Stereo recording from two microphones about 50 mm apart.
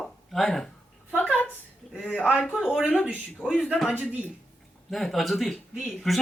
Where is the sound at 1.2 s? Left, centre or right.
Left.